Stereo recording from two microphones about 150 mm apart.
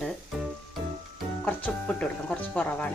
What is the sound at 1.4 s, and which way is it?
Speech, 10° left (ahead or behind).